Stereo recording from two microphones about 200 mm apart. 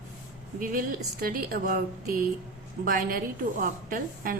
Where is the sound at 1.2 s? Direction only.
45° right (ahead or behind).